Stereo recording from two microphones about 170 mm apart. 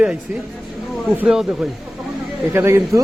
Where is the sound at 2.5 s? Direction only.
15° right (ahead or behind).